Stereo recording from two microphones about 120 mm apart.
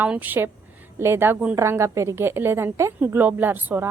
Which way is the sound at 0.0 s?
15° right (ahead or behind).